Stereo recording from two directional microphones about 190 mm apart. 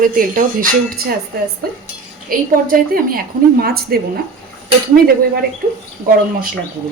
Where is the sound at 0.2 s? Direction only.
45° right (ahead or behind).